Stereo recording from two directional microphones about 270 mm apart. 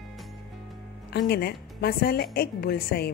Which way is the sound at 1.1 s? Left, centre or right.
Left.